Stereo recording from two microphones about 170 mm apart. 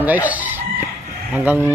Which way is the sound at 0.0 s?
10° right (ahead or behind).